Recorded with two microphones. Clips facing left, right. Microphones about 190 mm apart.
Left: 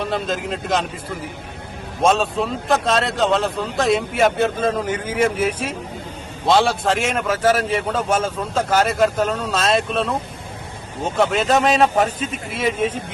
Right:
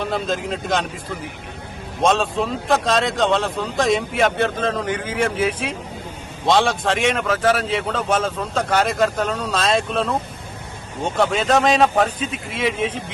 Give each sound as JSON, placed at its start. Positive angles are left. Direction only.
{"t": 0.0, "sound": "speech", "side_deg": 0}
{"t": 2.0, "sound": "a man's voice", "side_deg": 5}